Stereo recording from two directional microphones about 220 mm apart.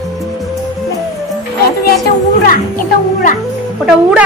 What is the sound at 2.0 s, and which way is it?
Speech, 40° left (ahead or behind).